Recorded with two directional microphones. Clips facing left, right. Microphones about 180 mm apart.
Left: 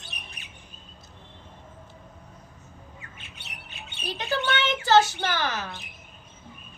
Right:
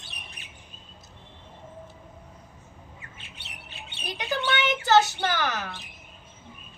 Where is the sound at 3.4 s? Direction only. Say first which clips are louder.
Even; 30° right (ahead or behind).